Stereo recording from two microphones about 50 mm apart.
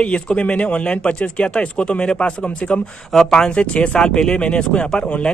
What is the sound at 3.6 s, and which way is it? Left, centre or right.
A man's voice, left.